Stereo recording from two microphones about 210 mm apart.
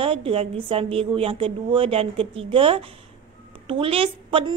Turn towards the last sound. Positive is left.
turn(degrees=-25)  # may be behind; listen again after turning